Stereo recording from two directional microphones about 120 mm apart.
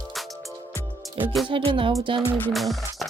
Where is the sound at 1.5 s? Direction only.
45° right (ahead or behind).